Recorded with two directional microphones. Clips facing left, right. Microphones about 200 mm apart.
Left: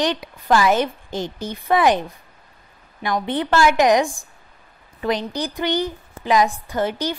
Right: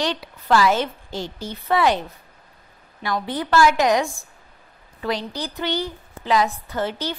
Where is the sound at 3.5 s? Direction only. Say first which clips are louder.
Left 1 dB; 20° left (ahead or behind).